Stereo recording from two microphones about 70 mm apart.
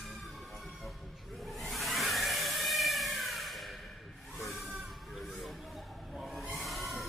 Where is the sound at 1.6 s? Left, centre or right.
Centre.